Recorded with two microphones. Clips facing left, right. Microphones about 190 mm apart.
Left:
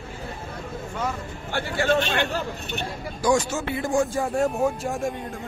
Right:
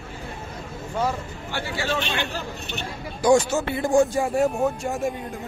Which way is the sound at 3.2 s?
30° right (ahead or behind).